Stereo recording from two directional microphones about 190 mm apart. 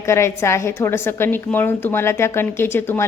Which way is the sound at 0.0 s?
15° left (ahead or behind).